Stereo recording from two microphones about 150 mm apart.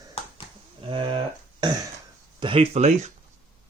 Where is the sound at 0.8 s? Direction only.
35° right (ahead or behind).